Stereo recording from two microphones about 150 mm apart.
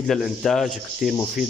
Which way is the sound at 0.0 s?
Centre (ahead or behind).